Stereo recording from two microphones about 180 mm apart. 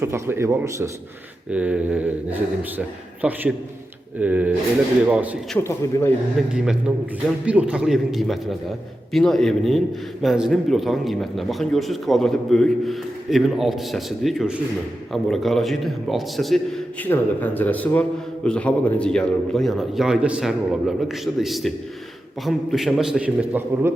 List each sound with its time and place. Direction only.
0.0 s speech: 15° right (ahead or behind)
5.5 s speech: 10° left (ahead or behind)
6.5 s speech: 5° right (ahead or behind)